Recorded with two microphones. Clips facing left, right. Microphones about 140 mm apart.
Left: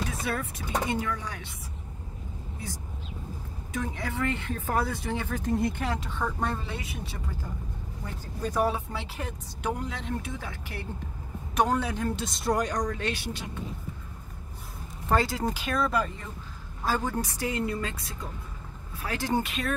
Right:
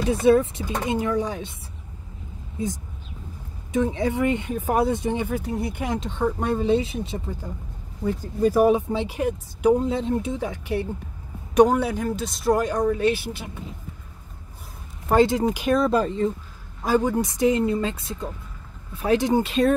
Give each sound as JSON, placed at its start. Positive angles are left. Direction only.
{"t": 0.1, "sound": "speech", "side_deg": -25}
{"t": 3.7, "sound": "speech", "side_deg": -25}
{"t": 8.7, "sound": "speech", "side_deg": -20}
{"t": 11.6, "sound": "speech", "side_deg": -10}
{"t": 15.1, "sound": "speech", "side_deg": -20}
{"t": 16.8, "sound": "speech", "side_deg": -15}